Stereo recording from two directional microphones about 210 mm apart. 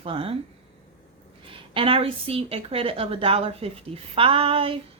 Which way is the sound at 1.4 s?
25° right (ahead or behind).